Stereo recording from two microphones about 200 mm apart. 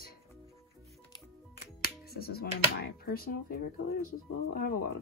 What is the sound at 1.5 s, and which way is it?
Speech, 50° left (ahead or behind).